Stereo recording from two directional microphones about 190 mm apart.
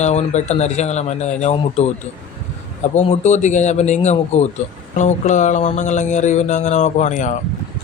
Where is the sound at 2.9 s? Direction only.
35° left (ahead or behind).